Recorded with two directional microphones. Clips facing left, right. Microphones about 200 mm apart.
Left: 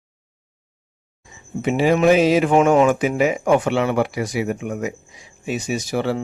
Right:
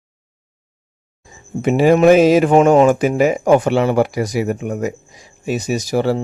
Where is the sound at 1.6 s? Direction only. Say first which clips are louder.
Right 5 dB; 45° right (ahead or behind).